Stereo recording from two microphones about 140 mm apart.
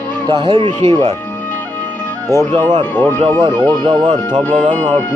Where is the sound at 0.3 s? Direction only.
30° right (ahead or behind).